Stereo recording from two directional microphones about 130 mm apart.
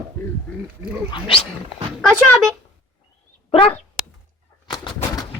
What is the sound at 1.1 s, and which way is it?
Speech, 40° left (ahead or behind).